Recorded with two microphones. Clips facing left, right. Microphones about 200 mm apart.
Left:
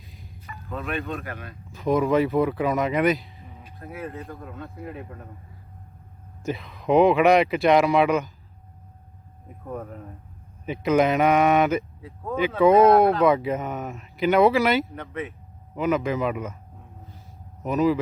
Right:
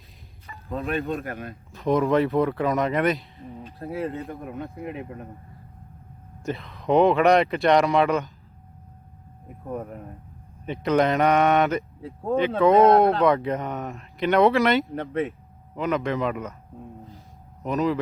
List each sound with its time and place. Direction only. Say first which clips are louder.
0.4 s music: right 3 dB; 30° right (ahead or behind)
1.2 s speech: right 3 dB; 50° right (ahead or behind)
1.7 s speech: even; centre (ahead or behind)
3.5 s a sound: right 7 dB; 30° right (ahead or behind)
4.3 s speech: right 4 dB; 15° right (ahead or behind)
6.4 s speech: left 1 dB; centre (ahead or behind)
10.7 s speech: left 1 dB; 5° left (ahead or behind)
12.0 s speech: right 3 dB; 30° right (ahead or behind)
12.5 s speech: left 1 dB; 5° left (ahead or behind)
14.9 s speech: right 6 dB; 30° right (ahead or behind)
15.7 s speech: left 2 dB; 5° left (ahead or behind)
17.6 s speech: left 2 dB; 5° left (ahead or behind)